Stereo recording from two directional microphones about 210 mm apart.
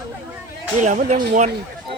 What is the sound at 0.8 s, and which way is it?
Speech, 35° right (ahead or behind).